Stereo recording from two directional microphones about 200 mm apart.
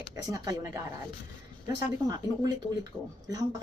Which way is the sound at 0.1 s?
15° right (ahead or behind).